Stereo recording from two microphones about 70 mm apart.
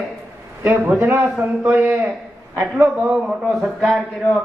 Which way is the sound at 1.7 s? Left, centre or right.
Right.